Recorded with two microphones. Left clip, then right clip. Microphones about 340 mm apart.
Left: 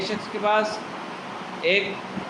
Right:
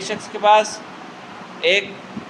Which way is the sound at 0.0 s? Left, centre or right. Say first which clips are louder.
Right 6 dB; right.